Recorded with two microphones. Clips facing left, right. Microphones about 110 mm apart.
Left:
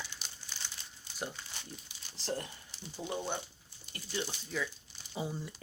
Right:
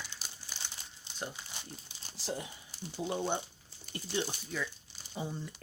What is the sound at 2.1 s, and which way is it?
Speech, 5° right (ahead or behind).